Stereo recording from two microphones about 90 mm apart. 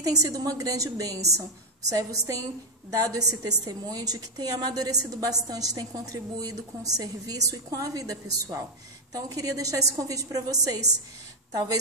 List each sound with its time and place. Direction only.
0.0 s a woman's voice: 40° right (ahead or behind)